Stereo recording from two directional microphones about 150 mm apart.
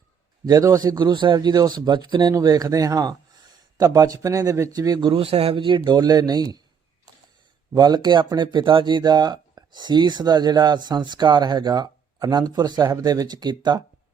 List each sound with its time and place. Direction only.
0.4 s a man's voice: 20° right (ahead or behind)
7.7 s a man's voice: 25° right (ahead or behind)